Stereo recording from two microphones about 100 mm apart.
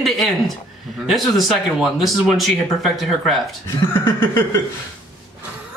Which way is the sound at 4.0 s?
20° left (ahead or behind).